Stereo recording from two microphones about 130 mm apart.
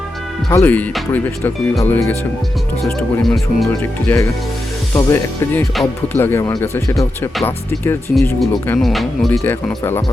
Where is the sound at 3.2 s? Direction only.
Centre (ahead or behind).